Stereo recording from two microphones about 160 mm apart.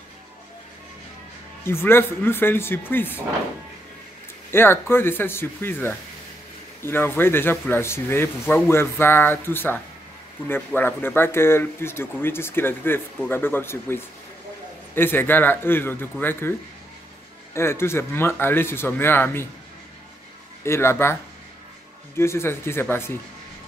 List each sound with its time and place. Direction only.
1.6 s speech: 15° left (ahead or behind)
4.5 s speech: 15° left (ahead or behind)
17.6 s speech: 15° left (ahead or behind)
20.6 s speech: 15° left (ahead or behind)